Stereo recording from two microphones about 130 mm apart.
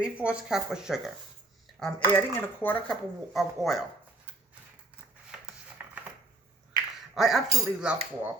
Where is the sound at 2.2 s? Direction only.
15° left (ahead or behind).